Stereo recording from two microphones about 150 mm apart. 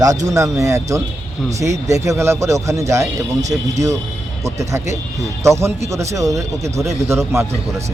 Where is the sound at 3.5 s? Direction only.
10° right (ahead or behind).